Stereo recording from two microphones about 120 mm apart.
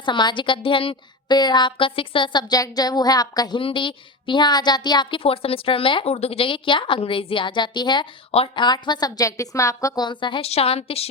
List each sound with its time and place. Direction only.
0.0 s a woman's voice: 40° left (ahead or behind)
3.6 s a woman's voice: 45° left (ahead or behind)
5.2 s a woman's voice: 50° left (ahead or behind)
8.3 s a woman's voice: 55° left (ahead or behind)
8.6 s a woman's voice: 35° left (ahead or behind)
10.5 s a woman's voice: 55° left (ahead or behind)